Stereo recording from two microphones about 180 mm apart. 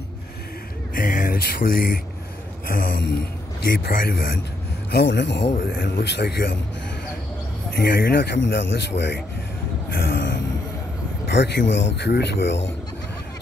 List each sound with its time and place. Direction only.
0.9 s a man's voice: 50° left (ahead or behind)
4.9 s a man's voice: 75° left (ahead or behind)
7.7 s a man's voice: 55° left (ahead or behind); by 9.2 s 70° left (ahead or behind)
9.9 s a sound: 75° left (ahead or behind)
11.2 s a man's voice: 75° left (ahead or behind)